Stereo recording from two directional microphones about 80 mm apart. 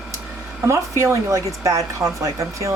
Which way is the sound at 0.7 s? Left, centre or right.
Right.